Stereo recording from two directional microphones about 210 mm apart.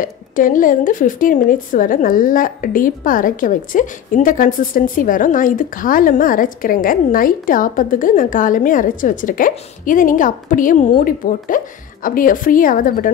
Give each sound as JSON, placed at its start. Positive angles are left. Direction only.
{"t": 0.0, "sound": "a woman's voice", "side_deg": 40}